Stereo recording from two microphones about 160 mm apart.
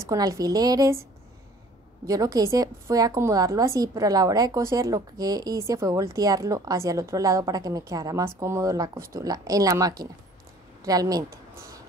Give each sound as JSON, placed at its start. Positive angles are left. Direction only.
{"t": 0.0, "sound": "a woman's voice", "side_deg": -20}
{"t": 2.0, "sound": "a woman's voice", "side_deg": -20}